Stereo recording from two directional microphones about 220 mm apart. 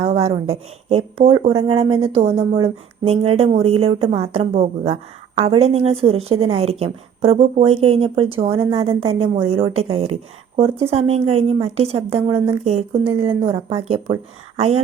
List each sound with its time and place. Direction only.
0.0 s speech: 25° right (ahead or behind)